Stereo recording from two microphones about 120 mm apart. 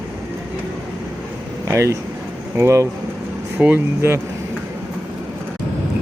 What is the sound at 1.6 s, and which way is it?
Speech, 25° right (ahead or behind).